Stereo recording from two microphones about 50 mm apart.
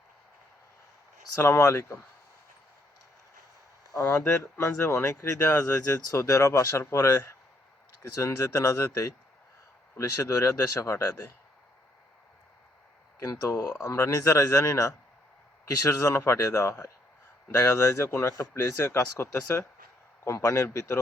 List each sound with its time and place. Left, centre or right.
1.4 s speech: left
1.6 s speech: left
4.2 s speech: left
4.6 s speech: left
8.2 s speech: left
13.3 s speech: left
15.6 s speech: left
20.2 s speech: left
20.7 s speech: left